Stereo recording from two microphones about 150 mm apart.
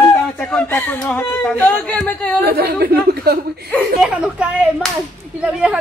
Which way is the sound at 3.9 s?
5° right (ahead or behind).